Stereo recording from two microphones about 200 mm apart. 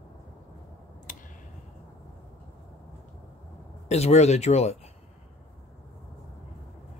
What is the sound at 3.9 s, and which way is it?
Speech, 35° left (ahead or behind).